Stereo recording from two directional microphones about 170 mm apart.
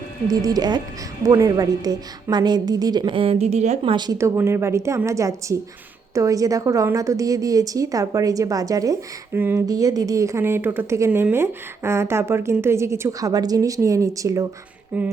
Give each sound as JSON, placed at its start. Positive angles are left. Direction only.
{"t": 0.3, "sound": "a woman's voice", "side_deg": -20}
{"t": 3.9, "sound": "a woman's voice", "side_deg": -25}
{"t": 14.9, "sound": "a woman's voice", "side_deg": -10}